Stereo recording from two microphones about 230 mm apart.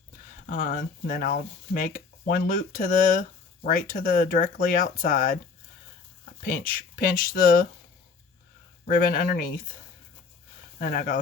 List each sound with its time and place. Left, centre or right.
0.5 s speech: left
6.4 s speech: left
8.9 s speech: left
10.8 s speech: left